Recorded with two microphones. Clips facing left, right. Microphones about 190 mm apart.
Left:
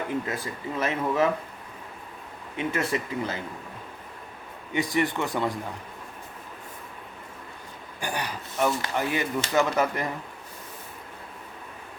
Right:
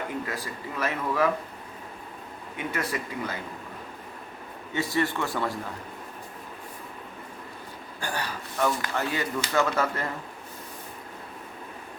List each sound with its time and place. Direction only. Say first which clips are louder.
0.3 s speech: left 3 dB; 20° left (ahead or behind)
2.6 s speech: left 4 dB; 25° left (ahead or behind)
4.7 s speech: left 2 dB; 15° left (ahead or behind)
8.0 s speech: left 1 dB; 15° left (ahead or behind)